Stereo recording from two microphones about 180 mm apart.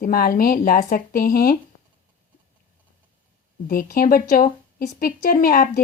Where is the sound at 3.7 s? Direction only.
55° left (ahead or behind).